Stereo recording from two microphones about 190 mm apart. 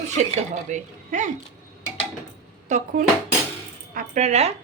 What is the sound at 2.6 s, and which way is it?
A woman's voice, 40° right (ahead or behind).